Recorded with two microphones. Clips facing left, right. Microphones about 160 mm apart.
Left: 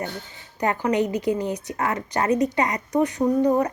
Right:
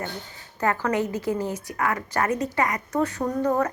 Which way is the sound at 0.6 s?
20° left (ahead or behind).